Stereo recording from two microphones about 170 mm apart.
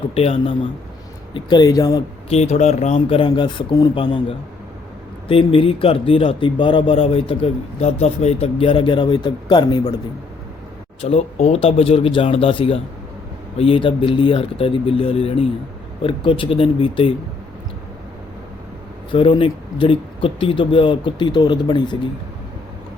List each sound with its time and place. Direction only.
0.1 s speech: 35° left (ahead or behind)
2.3 s speech: 40° left (ahead or behind); by 9.9 s 25° left (ahead or behind)
11.0 s speech: 35° left (ahead or behind)
19.1 s speech: 30° left (ahead or behind)